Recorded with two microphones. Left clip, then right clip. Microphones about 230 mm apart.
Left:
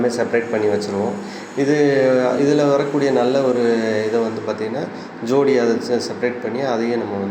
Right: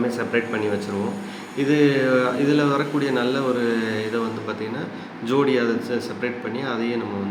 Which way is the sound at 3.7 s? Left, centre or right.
Centre.